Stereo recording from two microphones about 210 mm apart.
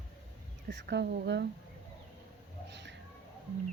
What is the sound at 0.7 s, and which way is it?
Speech, 55° right (ahead or behind).